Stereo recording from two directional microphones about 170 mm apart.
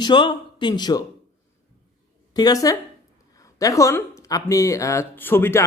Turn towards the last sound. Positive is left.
turn(degrees=15)  # may be behind; listen again after turning